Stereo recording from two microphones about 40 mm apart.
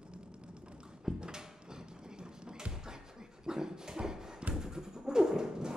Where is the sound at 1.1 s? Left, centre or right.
Centre.